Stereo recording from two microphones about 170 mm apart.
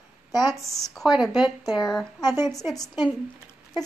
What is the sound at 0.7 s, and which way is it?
A woman's voice, centre (ahead or behind).